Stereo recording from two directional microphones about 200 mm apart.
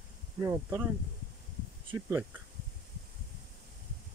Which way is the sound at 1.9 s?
10° right (ahead or behind).